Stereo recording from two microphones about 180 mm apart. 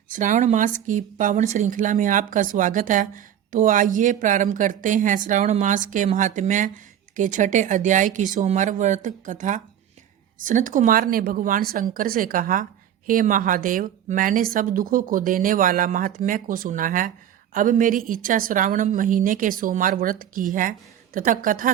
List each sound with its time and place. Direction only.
0.1 s speech: 45° right (ahead or behind)